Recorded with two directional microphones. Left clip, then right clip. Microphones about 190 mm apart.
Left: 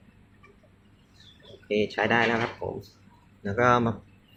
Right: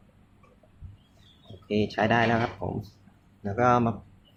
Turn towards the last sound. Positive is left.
turn(degrees=-10)  # may be behind; listen again after turning